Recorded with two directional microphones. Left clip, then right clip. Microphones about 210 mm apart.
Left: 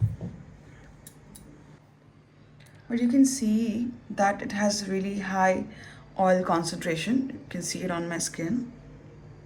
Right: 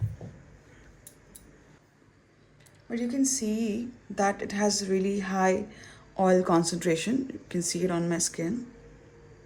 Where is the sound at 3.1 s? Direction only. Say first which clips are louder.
Left 5 dB; 50° right (ahead or behind).